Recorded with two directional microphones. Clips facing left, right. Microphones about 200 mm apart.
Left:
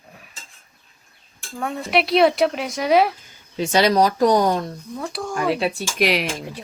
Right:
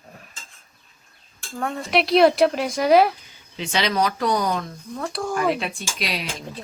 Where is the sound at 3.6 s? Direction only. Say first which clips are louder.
Left 6 dB; 45° left (ahead or behind).